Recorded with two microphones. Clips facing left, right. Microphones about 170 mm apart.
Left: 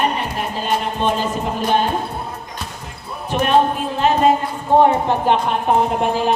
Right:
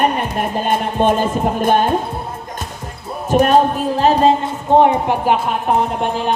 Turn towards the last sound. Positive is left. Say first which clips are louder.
# left 1 dB
turn(degrees=0)  # may be behind; listen again after turning